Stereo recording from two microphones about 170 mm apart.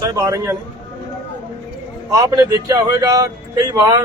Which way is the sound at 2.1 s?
20° right (ahead or behind).